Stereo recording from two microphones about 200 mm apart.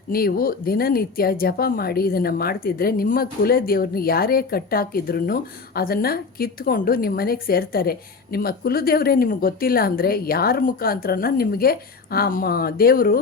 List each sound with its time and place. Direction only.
0.1 s speech: 50° left (ahead or behind)